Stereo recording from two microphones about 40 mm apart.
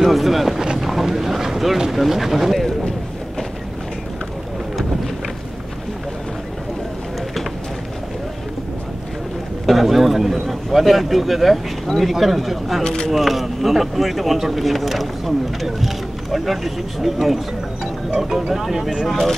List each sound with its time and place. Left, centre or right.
0.0 s boat: centre
0.7 s vehicle: centre
9.7 s a sound: centre
12.0 s speech: centre
12.8 s speech: centre
13.1 s speech: centre